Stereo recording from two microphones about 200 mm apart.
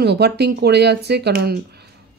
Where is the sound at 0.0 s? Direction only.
55° right (ahead or behind).